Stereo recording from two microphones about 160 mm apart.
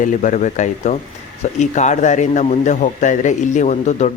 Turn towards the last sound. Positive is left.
turn(degrees=45)  # may be behind; listen again after turning